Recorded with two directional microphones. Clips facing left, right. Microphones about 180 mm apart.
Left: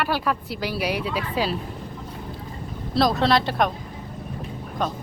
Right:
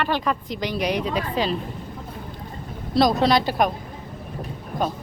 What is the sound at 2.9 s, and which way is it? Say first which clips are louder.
Speech: right 2 dB; centre (ahead or behind).